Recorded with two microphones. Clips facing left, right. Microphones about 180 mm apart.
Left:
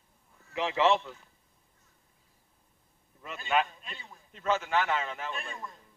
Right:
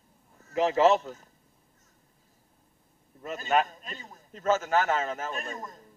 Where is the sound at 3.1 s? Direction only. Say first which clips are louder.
Right 3 dB; 40° right (ahead or behind).